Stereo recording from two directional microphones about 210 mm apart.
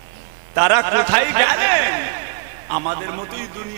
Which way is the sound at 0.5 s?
15° right (ahead or behind).